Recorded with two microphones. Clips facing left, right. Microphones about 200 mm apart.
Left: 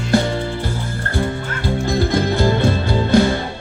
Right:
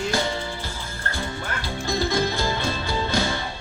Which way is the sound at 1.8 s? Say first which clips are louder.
Left 4 dB; 60° left (ahead or behind).